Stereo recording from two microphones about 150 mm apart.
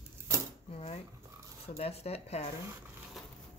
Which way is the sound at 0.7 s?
40° left (ahead or behind).